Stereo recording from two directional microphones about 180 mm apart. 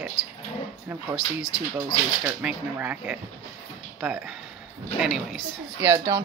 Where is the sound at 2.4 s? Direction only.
10° right (ahead or behind).